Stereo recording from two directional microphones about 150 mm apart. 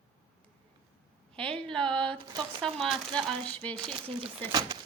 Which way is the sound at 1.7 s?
5° left (ahead or behind).